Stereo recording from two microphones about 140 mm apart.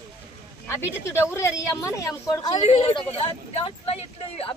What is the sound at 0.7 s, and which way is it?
A woman's voice, 20° left (ahead or behind).